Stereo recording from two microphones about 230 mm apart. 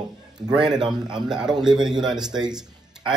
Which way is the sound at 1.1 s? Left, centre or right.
Centre.